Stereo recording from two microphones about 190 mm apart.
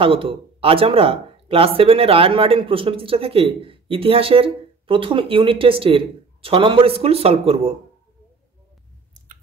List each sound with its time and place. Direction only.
0.0 s speech: 30° right (ahead or behind)